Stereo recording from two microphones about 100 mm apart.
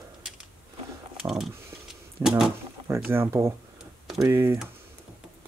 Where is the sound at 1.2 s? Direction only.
5° right (ahead or behind).